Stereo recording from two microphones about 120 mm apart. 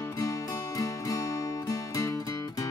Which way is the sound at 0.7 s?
30° left (ahead or behind).